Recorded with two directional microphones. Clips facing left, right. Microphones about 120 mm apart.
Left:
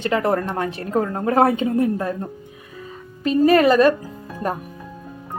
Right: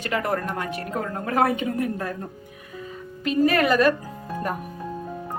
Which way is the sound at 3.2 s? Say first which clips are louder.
Left 5 dB; 30° left (ahead or behind).